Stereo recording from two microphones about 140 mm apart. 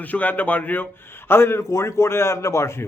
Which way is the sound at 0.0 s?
10° left (ahead or behind).